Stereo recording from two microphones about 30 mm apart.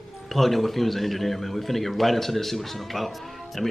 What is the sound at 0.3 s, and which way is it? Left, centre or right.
A man's voice, centre.